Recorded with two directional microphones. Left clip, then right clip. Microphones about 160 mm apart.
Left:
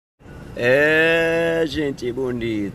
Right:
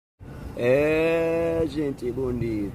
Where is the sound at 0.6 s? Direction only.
Centre (ahead or behind).